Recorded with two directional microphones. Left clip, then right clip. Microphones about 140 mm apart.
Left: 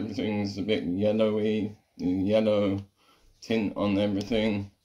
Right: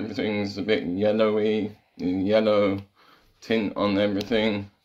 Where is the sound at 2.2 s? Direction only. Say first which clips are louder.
Right 4 dB; 5° left (ahead or behind).